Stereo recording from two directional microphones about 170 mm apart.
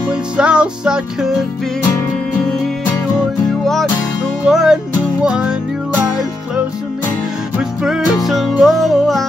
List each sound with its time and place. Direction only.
0.1 s music: 5° right (ahead or behind)
4.5 s music: 5° right (ahead or behind)
7.5 s music: 5° right (ahead or behind)